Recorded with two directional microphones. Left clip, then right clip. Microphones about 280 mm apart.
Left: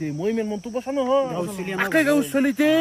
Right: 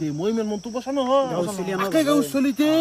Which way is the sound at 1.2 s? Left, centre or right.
Centre.